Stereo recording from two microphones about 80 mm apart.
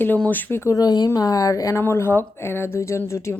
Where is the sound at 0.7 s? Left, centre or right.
Left.